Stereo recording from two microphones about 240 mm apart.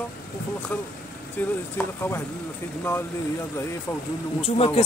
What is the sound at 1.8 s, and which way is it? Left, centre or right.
Speech, centre.